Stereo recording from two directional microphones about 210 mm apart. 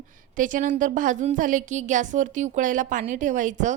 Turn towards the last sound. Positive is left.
turn(degrees=-35)  # may be behind; listen again after turning